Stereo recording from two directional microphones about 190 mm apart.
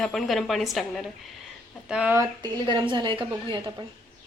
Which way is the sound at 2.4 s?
20° right (ahead or behind).